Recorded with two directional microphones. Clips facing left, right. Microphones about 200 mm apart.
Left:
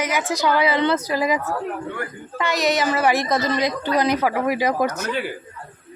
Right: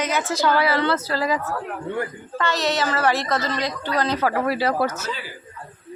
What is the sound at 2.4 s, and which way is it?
Speech, 10° left (ahead or behind).